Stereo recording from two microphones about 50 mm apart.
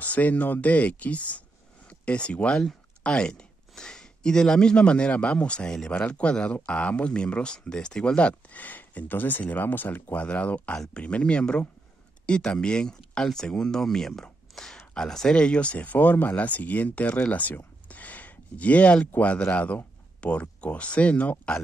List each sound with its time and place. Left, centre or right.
0.0 s speech: left
17.8 s a sound: left
19.1 s speech: left